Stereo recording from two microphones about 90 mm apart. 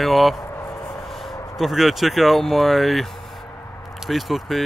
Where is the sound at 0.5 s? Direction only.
30° left (ahead or behind).